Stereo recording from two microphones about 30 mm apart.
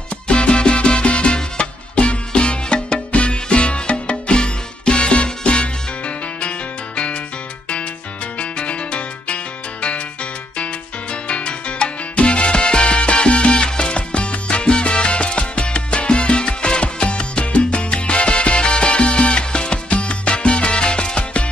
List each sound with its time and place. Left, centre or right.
0.3 s music: left
8.4 s music: left
10.6 s salsa music: left